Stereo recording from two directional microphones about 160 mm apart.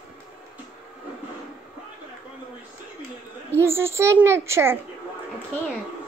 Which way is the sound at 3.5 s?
15° right (ahead or behind).